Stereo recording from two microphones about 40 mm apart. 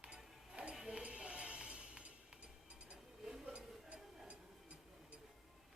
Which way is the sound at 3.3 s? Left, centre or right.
Right.